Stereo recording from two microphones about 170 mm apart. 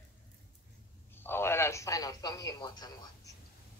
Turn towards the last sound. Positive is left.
turn(degrees=25)  # may be behind; listen again after turning